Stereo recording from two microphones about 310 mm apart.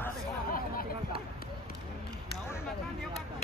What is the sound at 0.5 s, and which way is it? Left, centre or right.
Hubbub, left.